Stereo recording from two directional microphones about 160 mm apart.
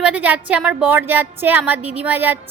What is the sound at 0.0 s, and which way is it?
A woman's voice, 10° right (ahead or behind).